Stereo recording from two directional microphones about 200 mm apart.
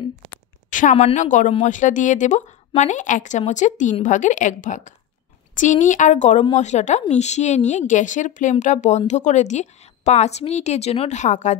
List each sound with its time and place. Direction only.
0.7 s a woman's voice: 40° left (ahead or behind)